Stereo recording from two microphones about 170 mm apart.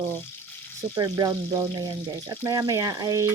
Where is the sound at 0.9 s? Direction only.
25° right (ahead or behind).